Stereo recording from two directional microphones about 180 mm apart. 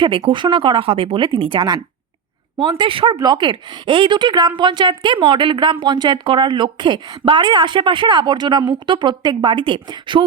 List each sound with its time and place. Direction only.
0.0 s speech: 30° right (ahead or behind)